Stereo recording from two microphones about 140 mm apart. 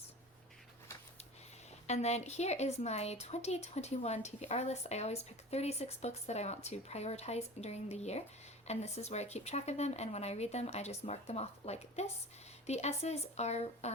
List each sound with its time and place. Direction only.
1.9 s a woman's voice: 50° left (ahead or behind)